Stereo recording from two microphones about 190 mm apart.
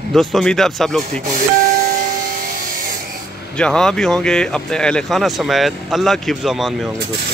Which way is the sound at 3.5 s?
5° left (ahead or behind).